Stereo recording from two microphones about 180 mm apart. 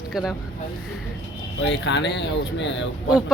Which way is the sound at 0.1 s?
Centre (ahead or behind).